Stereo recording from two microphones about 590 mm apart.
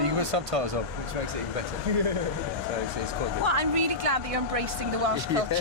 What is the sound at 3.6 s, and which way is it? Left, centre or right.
Speech, right.